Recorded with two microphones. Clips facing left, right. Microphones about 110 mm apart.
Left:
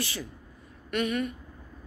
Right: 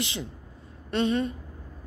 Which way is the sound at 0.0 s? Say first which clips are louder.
Right 2 dB; 20° right (ahead or behind).